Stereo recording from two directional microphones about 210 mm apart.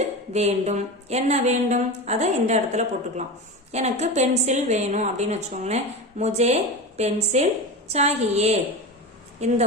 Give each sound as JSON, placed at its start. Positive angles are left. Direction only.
{"t": 0.3, "sound": "a woman's voice", "side_deg": -30}